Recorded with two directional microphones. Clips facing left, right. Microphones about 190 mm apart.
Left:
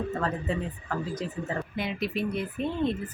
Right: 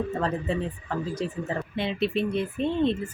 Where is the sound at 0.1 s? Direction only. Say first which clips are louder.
Right 2 dB; 25° right (ahead or behind).